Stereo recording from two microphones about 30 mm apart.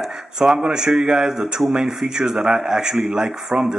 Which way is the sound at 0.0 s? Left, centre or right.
Centre.